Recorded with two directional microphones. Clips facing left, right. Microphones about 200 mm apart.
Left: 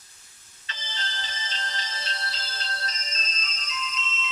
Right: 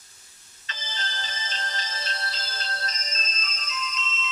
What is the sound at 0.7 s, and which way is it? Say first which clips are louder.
Music: right 1 dB; 45° right (ahead or behind).